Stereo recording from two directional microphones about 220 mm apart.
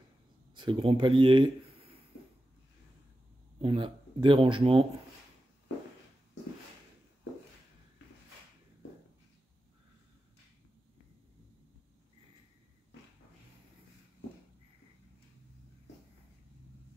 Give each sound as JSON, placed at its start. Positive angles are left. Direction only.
{"t": 0.6, "sound": "speech", "side_deg": -25}
{"t": 3.6, "sound": "speech", "side_deg": -20}